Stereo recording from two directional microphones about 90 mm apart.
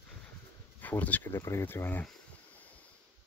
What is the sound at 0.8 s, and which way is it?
Speech, 20° left (ahead or behind).